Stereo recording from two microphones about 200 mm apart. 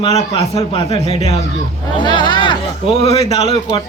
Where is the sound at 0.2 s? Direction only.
30° left (ahead or behind).